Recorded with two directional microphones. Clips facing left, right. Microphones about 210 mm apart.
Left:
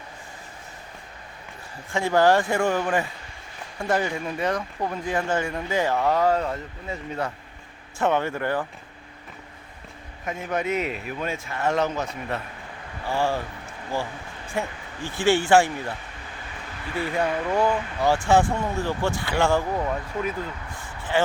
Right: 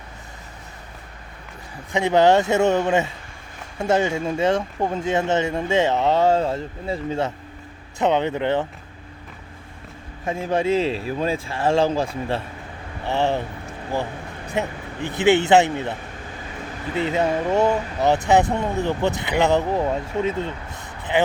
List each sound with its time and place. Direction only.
1.9 s speech: 20° right (ahead or behind)
10.2 s speech: 30° right (ahead or behind)